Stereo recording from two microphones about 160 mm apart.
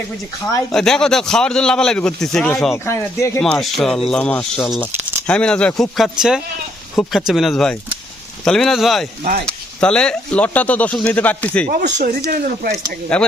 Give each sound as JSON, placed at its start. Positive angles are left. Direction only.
{"t": 0.7, "sound": "a man's voice", "side_deg": 5}
{"t": 2.7, "sound": "speech", "side_deg": 15}
{"t": 3.4, "sound": "a man's voice", "side_deg": 0}
{"t": 11.7, "sound": "speech", "side_deg": -65}
{"t": 13.1, "sound": "a man's voice", "side_deg": 5}